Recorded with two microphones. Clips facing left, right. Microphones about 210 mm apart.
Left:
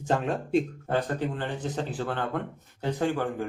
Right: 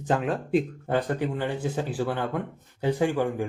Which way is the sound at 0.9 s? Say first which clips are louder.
Right 2 dB; 10° right (ahead or behind).